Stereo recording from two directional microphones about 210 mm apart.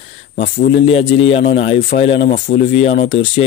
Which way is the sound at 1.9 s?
30° left (ahead or behind).